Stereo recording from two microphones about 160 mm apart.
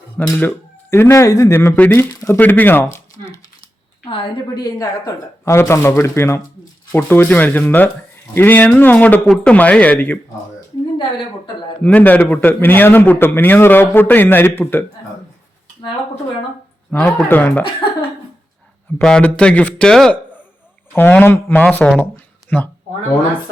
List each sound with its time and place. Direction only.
0.2 s a man's voice: 15° left (ahead or behind)
4.0 s a man's voice: 30° left (ahead or behind); by 10.2 s 10° left (ahead or behind)
11.8 s a man's voice: 10° left (ahead or behind)
16.9 s a man's voice: 15° left (ahead or behind)
18.9 s a man's voice: 10° left (ahead or behind)